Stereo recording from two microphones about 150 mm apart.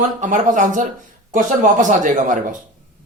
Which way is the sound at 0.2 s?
55° right (ahead or behind).